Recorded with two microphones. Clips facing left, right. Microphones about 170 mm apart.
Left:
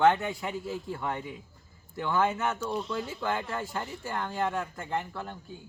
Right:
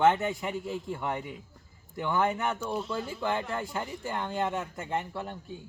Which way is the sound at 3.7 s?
15° right (ahead or behind).